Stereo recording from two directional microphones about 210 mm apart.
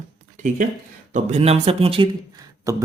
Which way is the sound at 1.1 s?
35° right (ahead or behind).